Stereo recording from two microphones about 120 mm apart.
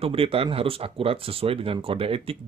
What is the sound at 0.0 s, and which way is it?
Speech, 50° right (ahead or behind).